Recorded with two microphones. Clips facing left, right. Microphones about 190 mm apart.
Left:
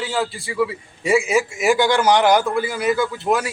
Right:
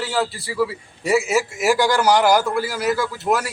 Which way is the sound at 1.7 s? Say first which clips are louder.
Left 1 dB; 20° left (ahead or behind).